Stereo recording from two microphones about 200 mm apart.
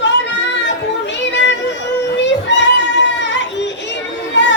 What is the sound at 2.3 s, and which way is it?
Child singing, 60° left (ahead or behind).